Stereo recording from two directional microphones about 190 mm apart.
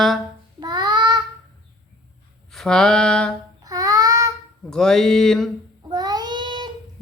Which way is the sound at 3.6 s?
20° right (ahead or behind).